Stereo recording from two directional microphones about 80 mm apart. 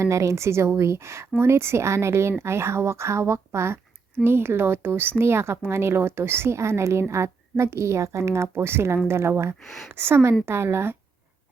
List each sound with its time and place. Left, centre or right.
0.0 s speech: right
9.6 s speech: centre
9.9 s a woman's voice: right